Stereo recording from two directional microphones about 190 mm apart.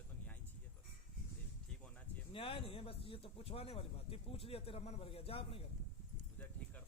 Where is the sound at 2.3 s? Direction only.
30° left (ahead or behind).